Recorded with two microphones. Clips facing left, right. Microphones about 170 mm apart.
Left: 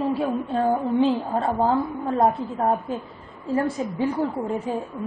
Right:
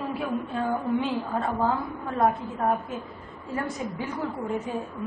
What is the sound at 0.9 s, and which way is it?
Speech, centre (ahead or behind).